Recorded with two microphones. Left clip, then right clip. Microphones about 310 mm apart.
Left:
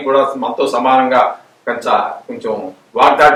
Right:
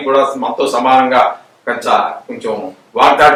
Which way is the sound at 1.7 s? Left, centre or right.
Centre.